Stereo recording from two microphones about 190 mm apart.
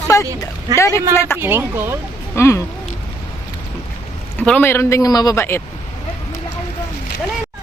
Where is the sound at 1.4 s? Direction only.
10° right (ahead or behind).